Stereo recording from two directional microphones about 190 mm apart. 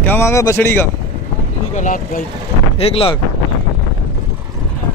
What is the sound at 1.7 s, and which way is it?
Speech, 45° left (ahead or behind).